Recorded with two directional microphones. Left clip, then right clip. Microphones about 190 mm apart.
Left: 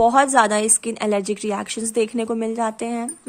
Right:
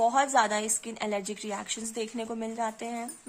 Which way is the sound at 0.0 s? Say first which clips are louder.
Left 9 dB; 25° left (ahead or behind).